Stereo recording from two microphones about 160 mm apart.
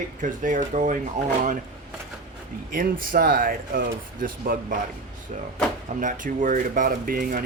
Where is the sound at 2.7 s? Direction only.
60° right (ahead or behind).